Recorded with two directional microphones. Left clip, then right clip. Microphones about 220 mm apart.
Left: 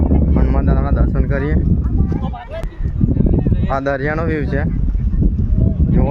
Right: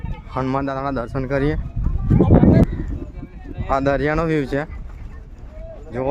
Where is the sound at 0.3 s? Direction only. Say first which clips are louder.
Left 1 dB; 20° right (ahead or behind).